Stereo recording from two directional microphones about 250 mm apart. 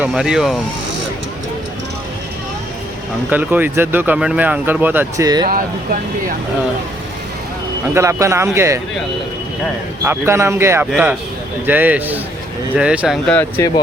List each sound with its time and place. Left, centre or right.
0.0 s speech: centre
3.2 s speech: centre
5.5 s speech: right
7.9 s speech: centre
10.0 s speech: centre